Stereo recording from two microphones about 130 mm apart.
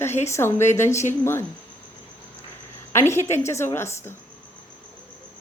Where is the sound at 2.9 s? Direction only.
20° left (ahead or behind).